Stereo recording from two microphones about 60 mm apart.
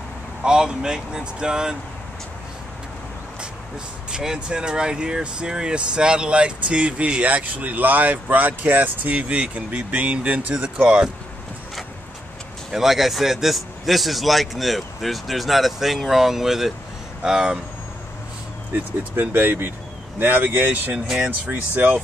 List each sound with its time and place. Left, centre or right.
0.4 s speech: centre
4.1 s speech: centre
12.7 s a man's voice: centre
18.7 s speech: right